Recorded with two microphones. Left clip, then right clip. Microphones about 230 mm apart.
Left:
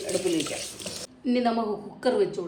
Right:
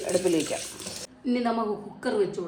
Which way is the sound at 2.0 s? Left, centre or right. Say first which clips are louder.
Left 3 dB; centre.